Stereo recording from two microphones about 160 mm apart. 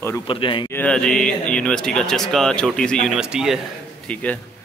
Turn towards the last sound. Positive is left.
turn(degrees=10)  # may be behind; listen again after turning